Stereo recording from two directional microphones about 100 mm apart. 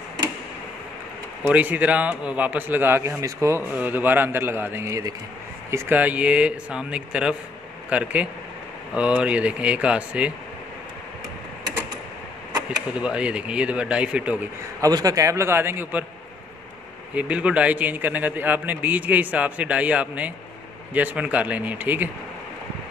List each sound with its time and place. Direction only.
1.5 s a man's voice: 15° right (ahead or behind)
3.7 s a man's voice: 15° right (ahead or behind)
5.9 s a man's voice: 15° right (ahead or behind)
13.0 s a man's voice: 10° right (ahead or behind)
14.8 s a man's voice: 40° right (ahead or behind); by 16.1 s 20° right (ahead or behind)
17.1 s a man's voice: 15° right (ahead or behind)